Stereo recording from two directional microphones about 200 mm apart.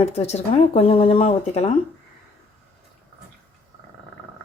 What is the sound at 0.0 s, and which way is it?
Speech, 30° left (ahead or behind).